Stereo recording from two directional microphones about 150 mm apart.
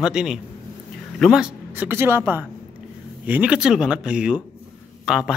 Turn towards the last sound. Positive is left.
turn(degrees=-5)  # may be behind; listen again after turning